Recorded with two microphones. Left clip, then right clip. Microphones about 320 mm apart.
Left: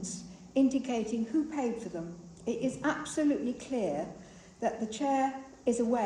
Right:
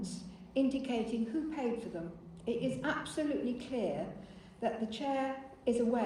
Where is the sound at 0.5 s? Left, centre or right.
Left.